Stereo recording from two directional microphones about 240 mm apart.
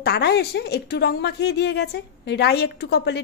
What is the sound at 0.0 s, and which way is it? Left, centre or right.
A woman's voice, left.